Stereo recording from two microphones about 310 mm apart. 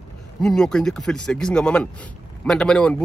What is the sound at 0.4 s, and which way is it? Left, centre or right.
Speech, centre.